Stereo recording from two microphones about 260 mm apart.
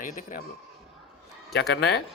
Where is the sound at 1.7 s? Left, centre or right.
Left.